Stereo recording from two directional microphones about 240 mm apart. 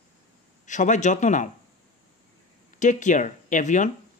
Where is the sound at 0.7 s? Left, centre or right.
Left.